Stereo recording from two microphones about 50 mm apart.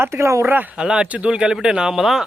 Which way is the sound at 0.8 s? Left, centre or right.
Centre.